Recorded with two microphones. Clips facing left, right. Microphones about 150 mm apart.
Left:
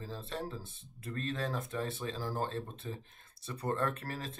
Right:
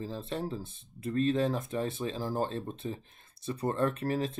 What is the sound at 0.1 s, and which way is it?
Speech, 20° right (ahead or behind).